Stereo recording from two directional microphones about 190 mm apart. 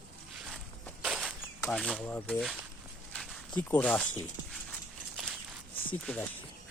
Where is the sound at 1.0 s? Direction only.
5° right (ahead or behind).